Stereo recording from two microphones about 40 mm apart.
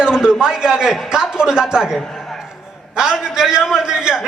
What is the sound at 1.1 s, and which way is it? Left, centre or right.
A man's voice, centre.